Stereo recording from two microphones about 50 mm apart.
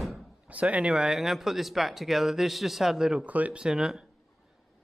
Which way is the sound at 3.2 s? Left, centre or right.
Right.